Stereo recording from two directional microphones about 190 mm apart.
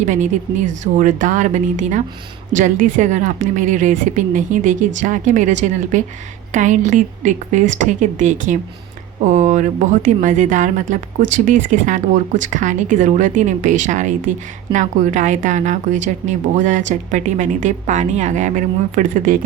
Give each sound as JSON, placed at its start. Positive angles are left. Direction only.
{"t": 0.0, "sound": "a woman's voice", "side_deg": -40}